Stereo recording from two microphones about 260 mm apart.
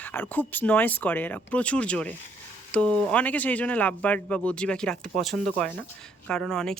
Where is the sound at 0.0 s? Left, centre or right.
Centre.